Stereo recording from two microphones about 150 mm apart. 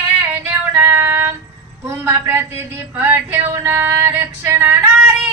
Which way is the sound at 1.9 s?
15° right (ahead or behind).